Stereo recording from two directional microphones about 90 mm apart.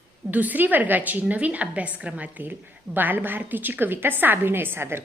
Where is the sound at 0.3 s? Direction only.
20° right (ahead or behind).